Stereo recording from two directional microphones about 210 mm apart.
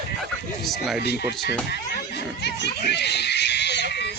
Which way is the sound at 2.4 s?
55° left (ahead or behind).